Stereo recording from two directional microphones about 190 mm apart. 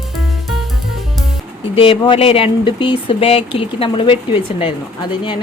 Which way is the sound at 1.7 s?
30° left (ahead or behind).